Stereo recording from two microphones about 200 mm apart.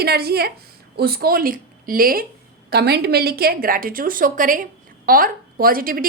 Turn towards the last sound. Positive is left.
turn(degrees=-45)  # may be behind; listen again after turning